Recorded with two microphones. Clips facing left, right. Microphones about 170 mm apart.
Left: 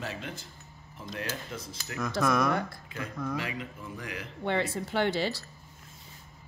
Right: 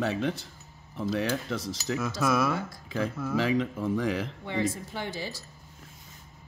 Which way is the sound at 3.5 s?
85° right.